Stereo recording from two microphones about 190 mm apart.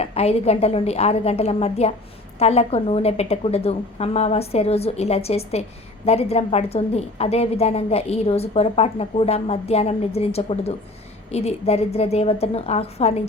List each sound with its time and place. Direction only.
0.0 s a woman's voice: 30° left (ahead or behind)